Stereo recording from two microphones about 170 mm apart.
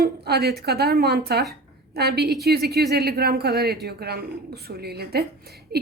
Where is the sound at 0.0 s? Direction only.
70° right (ahead or behind).